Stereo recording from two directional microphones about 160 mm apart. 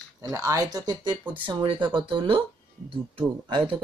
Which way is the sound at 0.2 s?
20° right (ahead or behind).